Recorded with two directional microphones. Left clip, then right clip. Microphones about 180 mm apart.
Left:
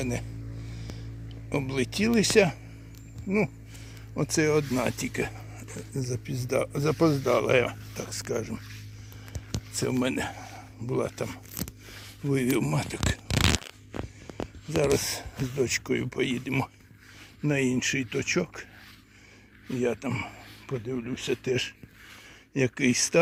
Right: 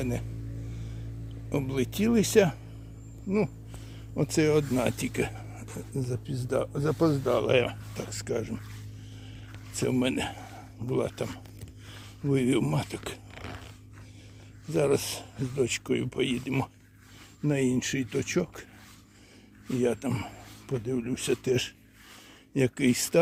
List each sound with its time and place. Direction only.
0.0 s speech: centre (ahead or behind)
1.5 s speech: centre (ahead or behind)
4.1 s speech: 5° right (ahead or behind)
5.9 s speech: centre (ahead or behind)
9.7 s speech: centre (ahead or behind)
11.9 s a sound: 5° left (ahead or behind)
12.4 s speech: 5° right (ahead or behind)
14.8 s speech: 5° left (ahead or behind)
19.8 s speech: 15° right (ahead or behind)